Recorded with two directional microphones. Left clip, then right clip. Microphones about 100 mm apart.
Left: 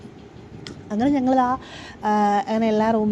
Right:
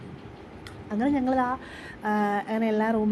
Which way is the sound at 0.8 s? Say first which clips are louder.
Left 5 dB; 40° left (ahead or behind).